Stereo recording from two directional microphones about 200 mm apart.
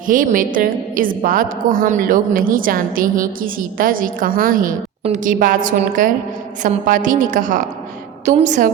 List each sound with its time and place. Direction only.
0.1 s a woman's voice: 40° right (ahead or behind)